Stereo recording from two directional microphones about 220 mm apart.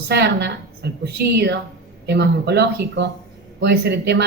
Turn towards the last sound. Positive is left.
turn(degrees=-50)  # may be behind; listen again after turning